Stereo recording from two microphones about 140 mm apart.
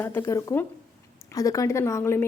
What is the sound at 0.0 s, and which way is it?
A woman's voice, 15° left (ahead or behind).